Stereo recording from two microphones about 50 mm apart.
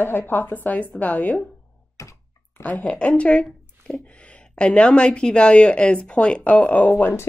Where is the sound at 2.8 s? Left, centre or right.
Left.